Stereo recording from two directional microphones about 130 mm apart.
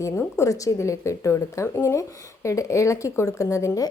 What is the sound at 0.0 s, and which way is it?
A woman's voice, 25° left (ahead or behind).